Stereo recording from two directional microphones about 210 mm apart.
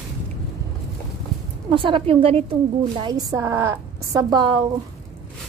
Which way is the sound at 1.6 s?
25° right (ahead or behind).